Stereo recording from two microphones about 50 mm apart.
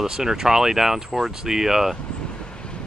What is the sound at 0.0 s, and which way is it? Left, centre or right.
Speech, centre.